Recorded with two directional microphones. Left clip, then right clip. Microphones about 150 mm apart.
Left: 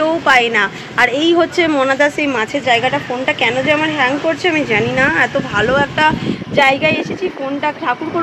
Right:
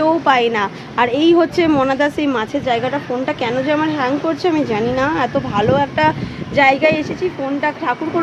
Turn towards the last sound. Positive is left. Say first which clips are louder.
# left 1 dB
turn(degrees=-25)  # may be behind; listen again after turning